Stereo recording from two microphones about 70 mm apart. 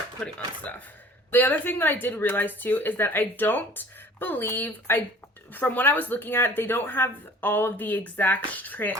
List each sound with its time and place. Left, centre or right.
0.3 s speech: left